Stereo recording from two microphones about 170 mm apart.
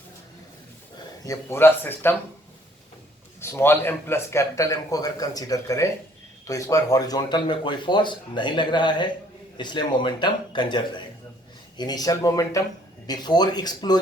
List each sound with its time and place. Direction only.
1.2 s speech: 15° left (ahead or behind)
3.4 s speech: 15° left (ahead or behind)